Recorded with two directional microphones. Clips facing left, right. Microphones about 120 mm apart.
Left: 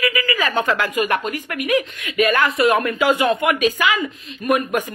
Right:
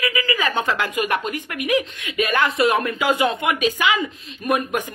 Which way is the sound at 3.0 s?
15° right (ahead or behind).